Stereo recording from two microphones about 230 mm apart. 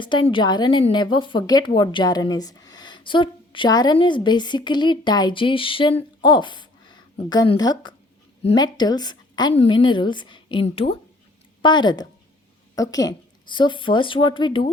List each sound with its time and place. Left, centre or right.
0.0 s a woman's voice: left